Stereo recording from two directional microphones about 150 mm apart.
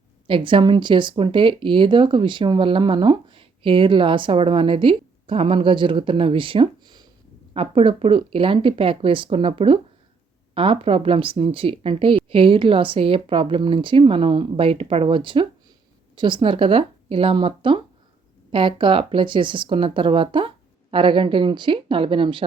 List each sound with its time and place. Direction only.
0.3 s speech: 35° right (ahead or behind)